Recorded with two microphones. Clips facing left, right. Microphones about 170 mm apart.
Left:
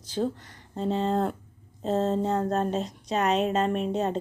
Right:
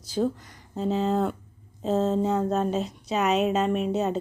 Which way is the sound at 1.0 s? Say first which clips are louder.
Right 1 dB; centre (ahead or behind).